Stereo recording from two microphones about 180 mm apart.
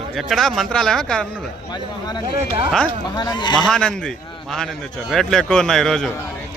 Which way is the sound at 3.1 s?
25° left (ahead or behind).